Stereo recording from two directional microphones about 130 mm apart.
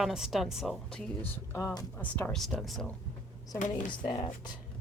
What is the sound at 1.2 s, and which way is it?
Speech, 20° left (ahead or behind).